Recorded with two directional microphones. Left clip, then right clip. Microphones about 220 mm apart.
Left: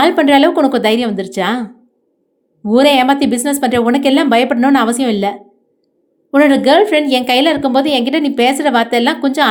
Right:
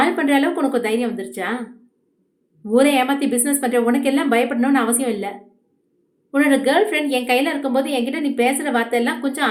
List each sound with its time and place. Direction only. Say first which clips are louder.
0.0 s a woman's voice: left 8 dB; 35° left (ahead or behind)
2.6 s a woman's voice: left 6 dB; 30° left (ahead or behind)